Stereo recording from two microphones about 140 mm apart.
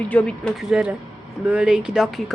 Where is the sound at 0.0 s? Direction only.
10° left (ahead or behind).